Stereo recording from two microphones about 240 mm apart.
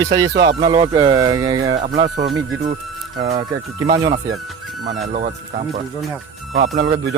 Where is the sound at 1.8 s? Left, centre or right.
Right.